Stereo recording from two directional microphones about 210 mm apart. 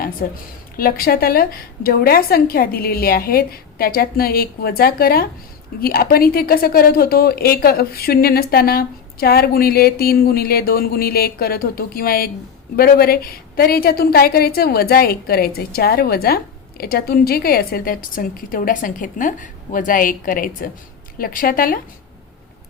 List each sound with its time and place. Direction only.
0.2 s a woman's voice: 45° left (ahead or behind)